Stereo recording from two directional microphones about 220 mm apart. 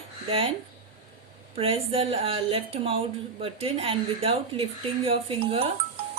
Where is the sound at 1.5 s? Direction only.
25° right (ahead or behind).